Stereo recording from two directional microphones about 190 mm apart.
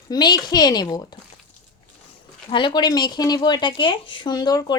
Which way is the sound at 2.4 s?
25° left (ahead or behind).